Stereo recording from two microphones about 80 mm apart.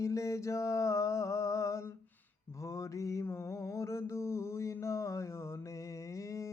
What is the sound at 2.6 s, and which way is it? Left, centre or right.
Mantra, left.